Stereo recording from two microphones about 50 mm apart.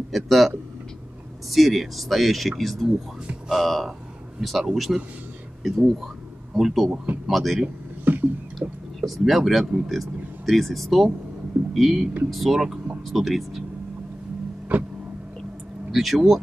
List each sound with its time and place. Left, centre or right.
0.1 s speech: centre
1.5 s speech: centre
8.0 s a sound: right
8.5 s speech: centre
12.5 s speech: centre
13.0 s speech: centre
14.7 s a sound: right
15.9 s speech: centre